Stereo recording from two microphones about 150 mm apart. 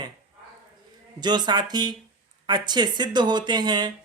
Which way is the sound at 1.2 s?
30° right (ahead or behind).